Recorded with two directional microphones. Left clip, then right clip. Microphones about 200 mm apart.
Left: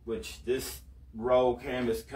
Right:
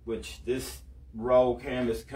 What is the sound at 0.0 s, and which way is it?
Speech, 15° right (ahead or behind).